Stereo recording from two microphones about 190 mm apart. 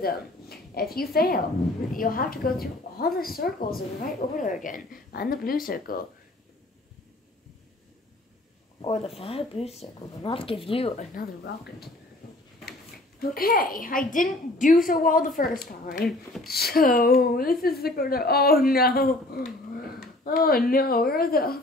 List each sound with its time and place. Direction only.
0.0 s speech: 55° left (ahead or behind)
8.8 s speech: 30° left (ahead or behind)
13.2 s speech: 50° left (ahead or behind)